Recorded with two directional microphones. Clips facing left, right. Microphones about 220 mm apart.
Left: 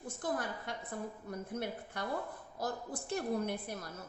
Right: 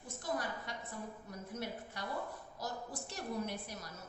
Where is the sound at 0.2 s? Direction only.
55° left (ahead or behind).